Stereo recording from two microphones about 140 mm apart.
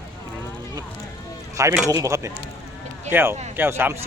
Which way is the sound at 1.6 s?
20° right (ahead or behind).